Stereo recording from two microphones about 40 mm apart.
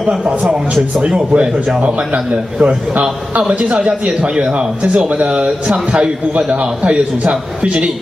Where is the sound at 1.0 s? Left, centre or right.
Right.